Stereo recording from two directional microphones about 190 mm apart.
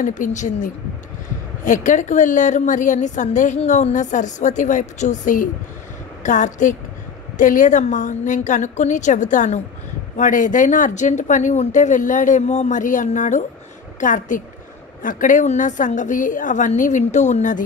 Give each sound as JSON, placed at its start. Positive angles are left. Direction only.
{"t": 0.0, "sound": "a woman's voice", "side_deg": 40}